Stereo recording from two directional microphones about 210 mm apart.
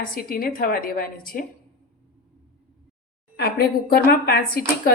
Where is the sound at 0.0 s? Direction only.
45° left (ahead or behind).